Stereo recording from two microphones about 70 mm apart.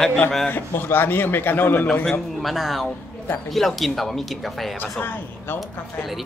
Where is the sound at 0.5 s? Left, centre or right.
Left.